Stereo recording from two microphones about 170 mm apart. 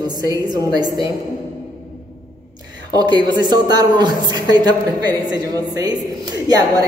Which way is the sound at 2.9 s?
25° right (ahead or behind).